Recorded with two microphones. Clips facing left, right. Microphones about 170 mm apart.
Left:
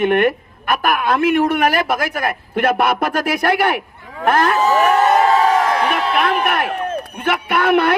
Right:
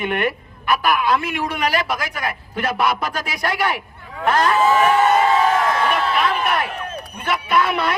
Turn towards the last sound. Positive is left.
turn(degrees=60)  # may be behind; listen again after turning